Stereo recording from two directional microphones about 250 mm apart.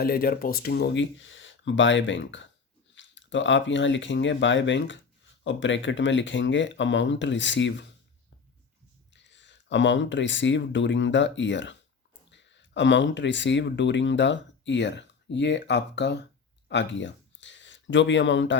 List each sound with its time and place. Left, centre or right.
0.0 s speech: left
9.1 s speech: left
16.6 s a sound: left